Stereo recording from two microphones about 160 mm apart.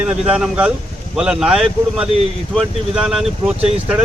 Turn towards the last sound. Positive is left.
turn(degrees=-5)  # may be behind; listen again after turning